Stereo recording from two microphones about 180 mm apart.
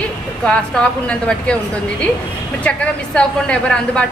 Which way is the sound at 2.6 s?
5° left (ahead or behind).